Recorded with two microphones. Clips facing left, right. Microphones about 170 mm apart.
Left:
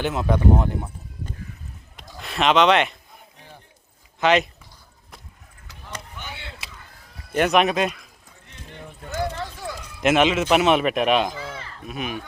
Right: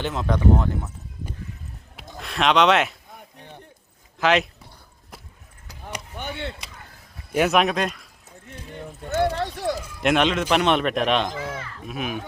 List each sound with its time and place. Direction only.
0.0 s speech: 10° left (ahead or behind)
2.1 s speech: centre (ahead or behind)
4.2 s speech: centre (ahead or behind)
6.1 s chop: 55° right (ahead or behind)
7.3 s speech: centre (ahead or behind)
9.4 s run: 70° right (ahead or behind)
10.0 s speech: centre (ahead or behind)
11.3 s sheep: 30° right (ahead or behind)
11.9 s speech: centre (ahead or behind)